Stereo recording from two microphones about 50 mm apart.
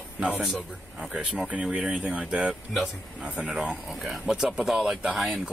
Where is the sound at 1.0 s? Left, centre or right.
Centre.